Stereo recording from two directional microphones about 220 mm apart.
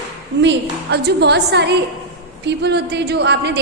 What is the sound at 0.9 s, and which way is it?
A woman's voice, 50° right (ahead or behind).